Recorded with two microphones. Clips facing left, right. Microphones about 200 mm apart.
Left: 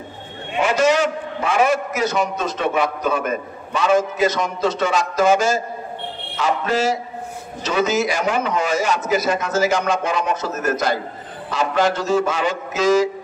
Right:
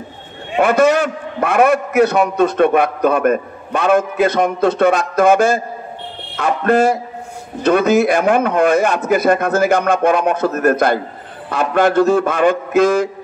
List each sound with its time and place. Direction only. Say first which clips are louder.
0.6 s a man's voice: right 4 dB; 55° right (ahead or behind)